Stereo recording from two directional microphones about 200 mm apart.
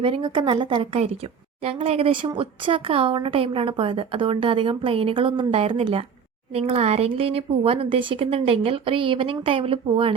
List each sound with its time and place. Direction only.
0.0 s speech: 25° right (ahead or behind)